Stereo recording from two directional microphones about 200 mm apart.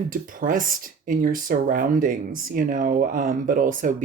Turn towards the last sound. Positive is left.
turn(degrees=-40)  # may be behind; listen again after turning